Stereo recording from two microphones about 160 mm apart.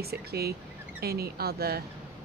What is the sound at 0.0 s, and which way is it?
Speech, 80° right.